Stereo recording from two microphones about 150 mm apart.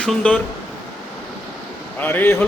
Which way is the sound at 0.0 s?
5° left (ahead or behind).